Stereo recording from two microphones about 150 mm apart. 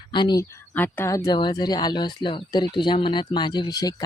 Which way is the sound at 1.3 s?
30° left (ahead or behind).